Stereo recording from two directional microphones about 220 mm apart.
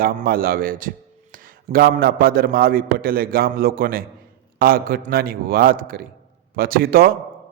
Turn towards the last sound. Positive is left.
turn(degrees=-40)  # may be behind; listen again after turning